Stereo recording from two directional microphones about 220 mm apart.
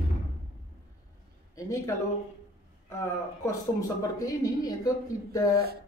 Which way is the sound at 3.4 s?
15° left (ahead or behind).